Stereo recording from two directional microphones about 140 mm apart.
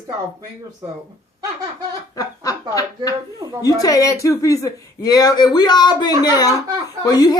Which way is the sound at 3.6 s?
25° left (ahead or behind).